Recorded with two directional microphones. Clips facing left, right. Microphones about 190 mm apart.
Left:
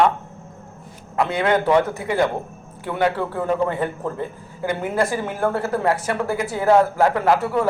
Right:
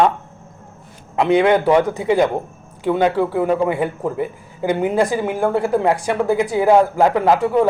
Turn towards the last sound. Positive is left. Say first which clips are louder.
# right 4 dB
turn(degrees=-15)  # may be behind; listen again after turning